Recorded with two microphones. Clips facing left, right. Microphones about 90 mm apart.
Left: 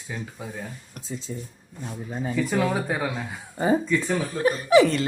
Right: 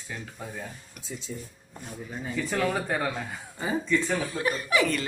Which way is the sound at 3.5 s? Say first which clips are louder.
Left 5 dB; 40° left (ahead or behind).